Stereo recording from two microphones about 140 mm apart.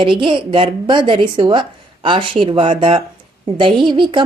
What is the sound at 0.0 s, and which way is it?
Speech, 35° right (ahead or behind).